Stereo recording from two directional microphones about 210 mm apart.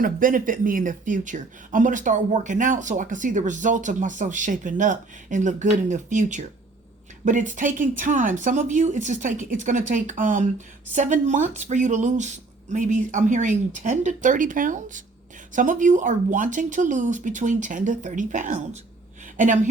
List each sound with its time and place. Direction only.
0.0 s speech: 40° right (ahead or behind)